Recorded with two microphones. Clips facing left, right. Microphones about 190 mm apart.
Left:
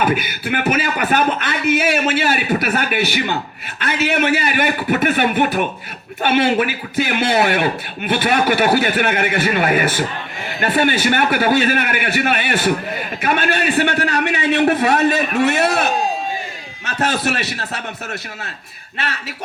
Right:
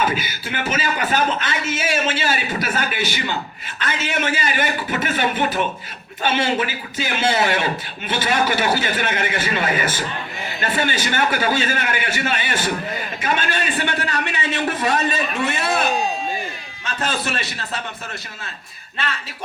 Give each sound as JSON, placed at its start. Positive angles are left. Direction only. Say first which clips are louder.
{"t": 0.0, "sound": "a man's voice", "louder": "left 4 dB", "side_deg": 55}
{"t": 16.8, "sound": "a man's voice", "louder": "left 5 dB", "side_deg": 65}